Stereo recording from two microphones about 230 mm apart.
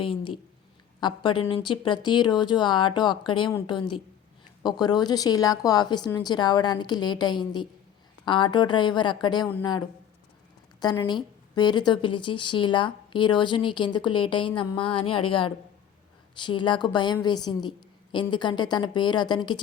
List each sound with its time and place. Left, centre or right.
0.0 s a woman's voice: left
10.8 s a woman's voice: centre